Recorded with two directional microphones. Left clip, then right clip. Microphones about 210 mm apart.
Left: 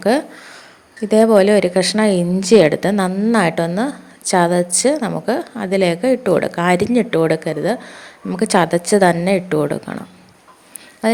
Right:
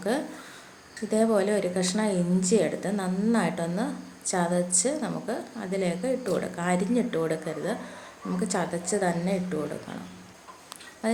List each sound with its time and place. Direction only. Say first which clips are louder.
1.0 s a woman's voice: left 13 dB; 35° left (ahead or behind)
11.0 s speech: left 11 dB; 40° left (ahead or behind)